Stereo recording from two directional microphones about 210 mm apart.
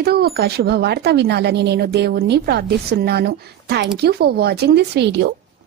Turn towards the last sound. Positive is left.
turn(degrees=-55)  # may be behind; listen again after turning